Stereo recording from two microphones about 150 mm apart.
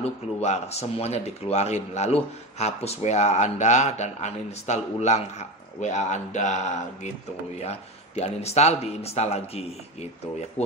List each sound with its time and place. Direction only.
0.0 s speech: 45° left (ahead or behind)